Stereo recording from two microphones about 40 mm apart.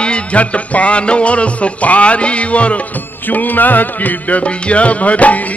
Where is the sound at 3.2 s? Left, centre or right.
Left.